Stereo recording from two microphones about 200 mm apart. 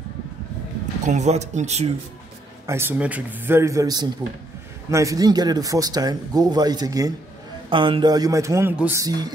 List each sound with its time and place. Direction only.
1.0 s speech: 35° right (ahead or behind)
2.6 s speech: 10° right (ahead or behind)